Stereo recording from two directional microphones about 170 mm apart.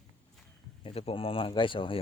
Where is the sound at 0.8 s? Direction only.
35° left (ahead or behind).